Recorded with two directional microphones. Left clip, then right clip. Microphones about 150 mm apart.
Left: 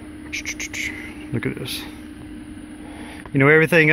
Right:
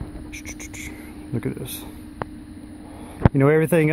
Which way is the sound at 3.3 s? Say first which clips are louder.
Left 4 dB; 15° right (ahead or behind).